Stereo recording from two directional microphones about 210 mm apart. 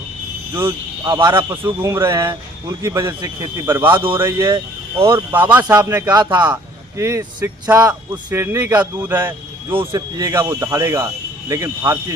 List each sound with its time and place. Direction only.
0.5 s a man's voice: 15° right (ahead or behind)
9.7 s a man's voice: 20° right (ahead or behind)